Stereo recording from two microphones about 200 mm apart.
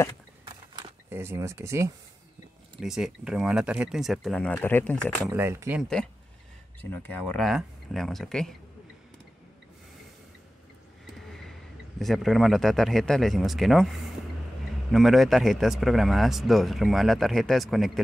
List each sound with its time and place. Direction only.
0.5 s a sound: 25° right (ahead or behind)
1.1 s speech: 10° right (ahead or behind)
2.8 s a man's voice: centre (ahead or behind)
5.3 s speech: 15° right (ahead or behind)
5.8 s a man's voice: 5° left (ahead or behind)
12.0 s a man's voice: centre (ahead or behind)